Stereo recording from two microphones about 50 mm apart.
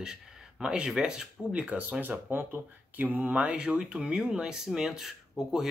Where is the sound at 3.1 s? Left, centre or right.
Right.